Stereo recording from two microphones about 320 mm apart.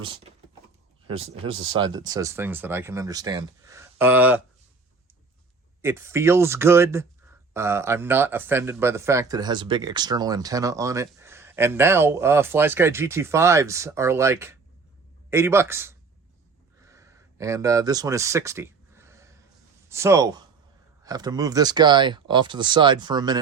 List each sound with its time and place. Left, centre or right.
0.0 s speech: centre
1.6 s speech: centre
5.8 s speech: centre
16.8 s a sound: centre
19.9 s speech: centre